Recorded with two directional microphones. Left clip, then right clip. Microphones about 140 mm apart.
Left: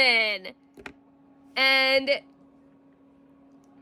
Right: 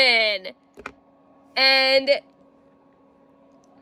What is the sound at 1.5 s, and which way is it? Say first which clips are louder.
Speech: right 4 dB; 20° left (ahead or behind).